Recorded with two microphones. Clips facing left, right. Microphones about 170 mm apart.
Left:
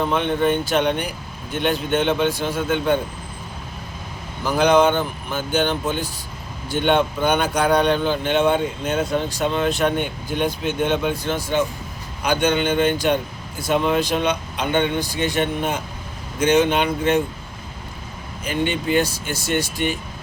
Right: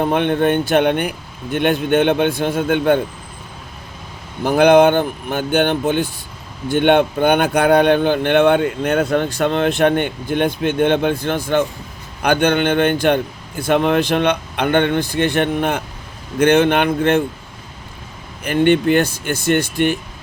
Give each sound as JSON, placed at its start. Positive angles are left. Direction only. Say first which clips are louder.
{"t": 0.0, "sound": "speech", "louder": "right 4 dB", "side_deg": -60}
{"t": 4.4, "sound": "speech", "louder": "right 5 dB", "side_deg": -60}
{"t": 18.4, "sound": "speech", "louder": "right 8 dB", "side_deg": -60}